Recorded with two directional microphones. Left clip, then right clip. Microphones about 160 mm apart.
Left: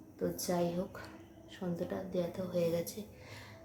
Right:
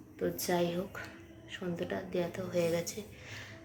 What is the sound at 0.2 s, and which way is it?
A woman's voice, 5° left (ahead or behind).